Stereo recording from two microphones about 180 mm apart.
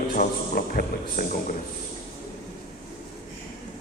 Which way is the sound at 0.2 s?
55° left (ahead or behind).